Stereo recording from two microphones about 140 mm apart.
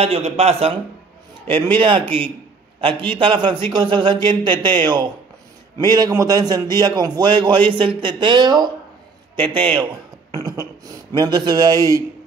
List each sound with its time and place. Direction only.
0.0 s a man's voice: 45° right (ahead or behind)
1.5 s speech: 35° right (ahead or behind)